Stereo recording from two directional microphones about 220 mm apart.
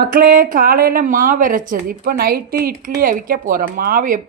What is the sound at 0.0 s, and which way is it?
A woman's voice, 40° right (ahead or behind).